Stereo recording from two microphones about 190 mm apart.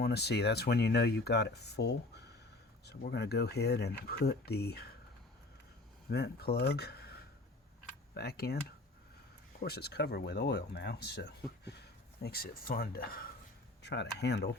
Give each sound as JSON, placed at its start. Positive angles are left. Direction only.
{"t": 0.0, "sound": "speech", "side_deg": 60}
{"t": 6.1, "sound": "speech", "side_deg": 60}
{"t": 9.6, "sound": "speech", "side_deg": 55}
{"t": 13.8, "sound": "speech", "side_deg": 65}